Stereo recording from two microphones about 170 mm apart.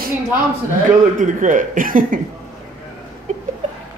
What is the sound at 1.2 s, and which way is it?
Speech, 50° right (ahead or behind).